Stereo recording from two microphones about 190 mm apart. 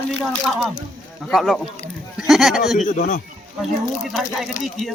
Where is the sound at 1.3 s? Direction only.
Centre (ahead or behind).